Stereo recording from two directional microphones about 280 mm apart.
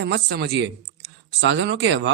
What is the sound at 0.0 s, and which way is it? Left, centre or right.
Speech, right.